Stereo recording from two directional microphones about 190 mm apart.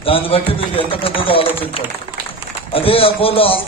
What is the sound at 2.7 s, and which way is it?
Speech, 30° left (ahead or behind).